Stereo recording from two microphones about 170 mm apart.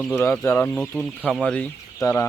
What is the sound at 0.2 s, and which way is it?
Speech, 15° left (ahead or behind).